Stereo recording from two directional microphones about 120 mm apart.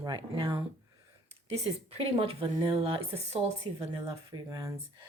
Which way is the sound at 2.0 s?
55° right (ahead or behind).